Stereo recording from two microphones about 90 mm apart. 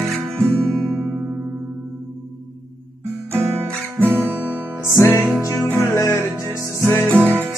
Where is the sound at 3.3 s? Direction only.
25° right (ahead or behind).